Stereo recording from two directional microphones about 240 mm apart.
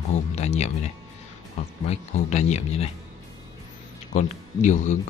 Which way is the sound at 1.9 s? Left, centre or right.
Left.